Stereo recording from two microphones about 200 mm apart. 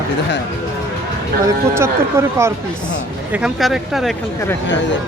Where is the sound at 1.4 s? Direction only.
15° right (ahead or behind).